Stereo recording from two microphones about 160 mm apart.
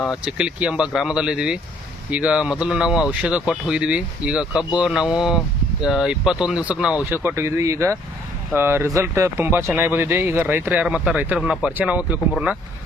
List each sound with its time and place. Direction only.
0.0 s speech: 5° right (ahead or behind)